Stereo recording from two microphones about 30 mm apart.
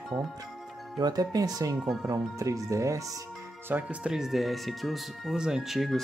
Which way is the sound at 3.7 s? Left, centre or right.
Right.